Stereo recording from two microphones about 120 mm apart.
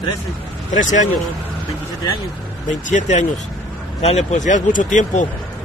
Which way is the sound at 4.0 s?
65° left (ahead or behind).